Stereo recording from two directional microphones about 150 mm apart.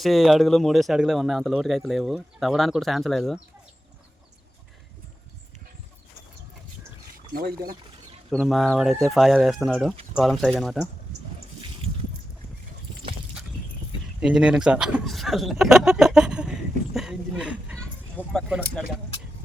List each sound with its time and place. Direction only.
0.0 s speech: centre (ahead or behind)
7.3 s speech: 80° right
8.3 s speech: centre (ahead or behind)
14.2 s speech: 5° right (ahead or behind)
16.9 s a sound: 5° right (ahead or behind)
17.7 s a sound: 5° left (ahead or behind)